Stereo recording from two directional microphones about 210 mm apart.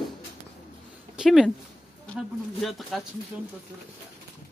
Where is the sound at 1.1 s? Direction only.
Centre (ahead or behind).